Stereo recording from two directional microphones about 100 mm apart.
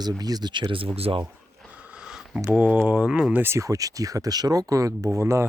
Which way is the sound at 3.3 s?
25° right (ahead or behind).